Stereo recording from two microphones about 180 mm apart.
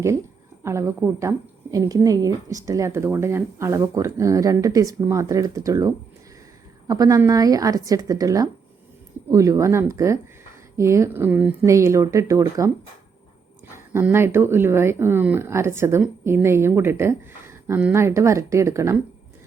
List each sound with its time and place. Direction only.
0.6 s a woman's voice: 15° right (ahead or behind)
13.7 s speech: 10° right (ahead or behind)